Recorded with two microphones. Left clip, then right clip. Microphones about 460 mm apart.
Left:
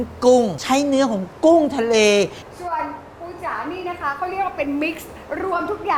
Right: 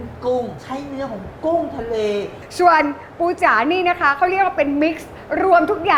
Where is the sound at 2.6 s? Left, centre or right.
Right.